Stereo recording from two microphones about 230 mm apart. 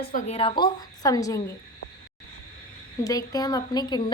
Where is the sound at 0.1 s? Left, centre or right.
Left; by 1.4 s centre.